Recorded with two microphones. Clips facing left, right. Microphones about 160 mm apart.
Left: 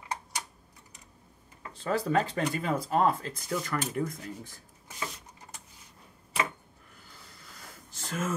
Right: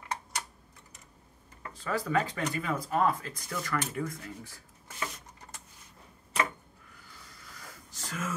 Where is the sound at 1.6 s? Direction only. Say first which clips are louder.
Left 3 dB; 25° left (ahead or behind).